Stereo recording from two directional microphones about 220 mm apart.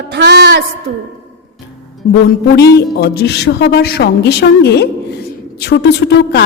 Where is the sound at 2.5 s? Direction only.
45° left (ahead or behind).